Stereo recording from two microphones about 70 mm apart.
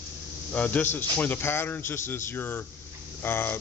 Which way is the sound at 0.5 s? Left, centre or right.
Left.